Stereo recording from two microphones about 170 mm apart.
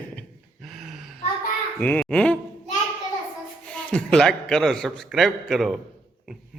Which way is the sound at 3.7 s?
5° left (ahead or behind).